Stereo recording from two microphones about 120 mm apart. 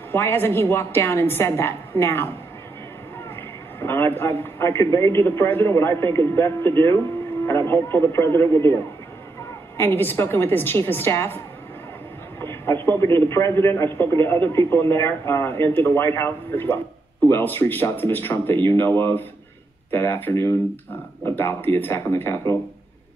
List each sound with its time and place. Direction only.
0.1 s a man's voice: 20° left (ahead or behind)
3.8 s a man's voice: 20° left (ahead or behind)
12.4 s a sound: 20° left (ahead or behind)
12.8 s a man's voice: 20° left (ahead or behind)